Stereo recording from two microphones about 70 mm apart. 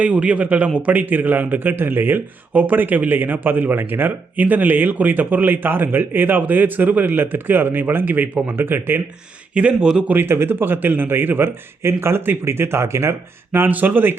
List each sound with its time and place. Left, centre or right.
0.0 s a man's voice: centre; by 9.0 s right
9.6 s a man's voice: centre
10.1 s a man's voice: right